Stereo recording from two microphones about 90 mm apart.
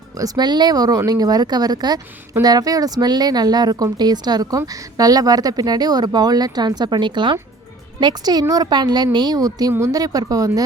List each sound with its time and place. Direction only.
0.2 s speech: 50° right (ahead or behind)